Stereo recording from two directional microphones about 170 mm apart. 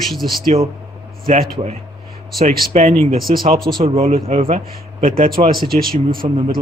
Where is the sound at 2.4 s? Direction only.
40° right (ahead or behind).